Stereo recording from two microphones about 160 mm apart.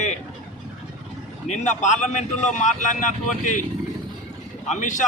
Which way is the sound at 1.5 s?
45° left (ahead or behind).